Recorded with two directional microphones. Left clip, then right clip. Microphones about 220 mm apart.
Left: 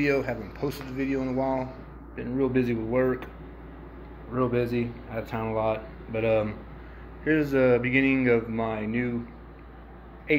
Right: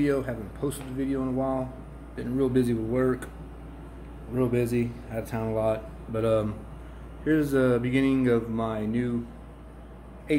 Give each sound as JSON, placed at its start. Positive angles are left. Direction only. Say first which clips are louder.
{"t": 0.0, "sound": "speech", "louder": "left 1 dB", "side_deg": -5}
{"t": 4.4, "sound": "speech", "louder": "even", "side_deg": -15}